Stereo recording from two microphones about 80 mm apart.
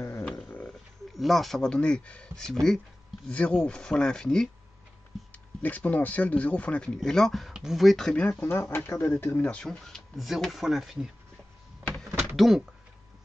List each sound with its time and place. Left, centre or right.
0.5 s a sound: centre
1.1 s speech: centre
3.3 s speech: centre
5.1 s a sound: centre
5.6 s speech: left
8.3 s speech: left
9.4 s speech: centre
12.4 s speech: centre